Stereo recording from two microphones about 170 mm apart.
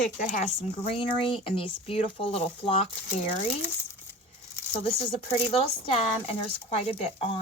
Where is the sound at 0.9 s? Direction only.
30° left (ahead or behind).